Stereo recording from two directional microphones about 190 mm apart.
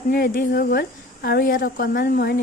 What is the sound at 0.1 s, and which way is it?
A woman's voice, 50° left (ahead or behind).